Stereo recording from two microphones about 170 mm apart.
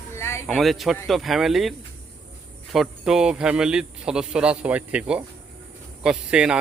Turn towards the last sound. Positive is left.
turn(degrees=-5)  # may be behind; listen again after turning